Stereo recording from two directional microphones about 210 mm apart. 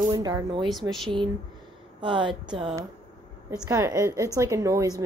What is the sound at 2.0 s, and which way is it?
A woman's voice, 25° right (ahead or behind).